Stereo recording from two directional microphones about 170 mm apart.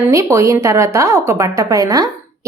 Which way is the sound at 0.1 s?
20° right (ahead or behind).